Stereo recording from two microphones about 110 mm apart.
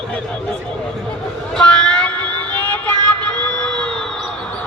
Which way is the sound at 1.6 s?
10° left (ahead or behind).